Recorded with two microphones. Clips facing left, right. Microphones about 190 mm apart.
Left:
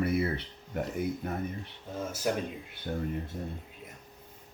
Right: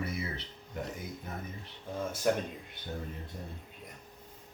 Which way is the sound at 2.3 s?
5° left (ahead or behind).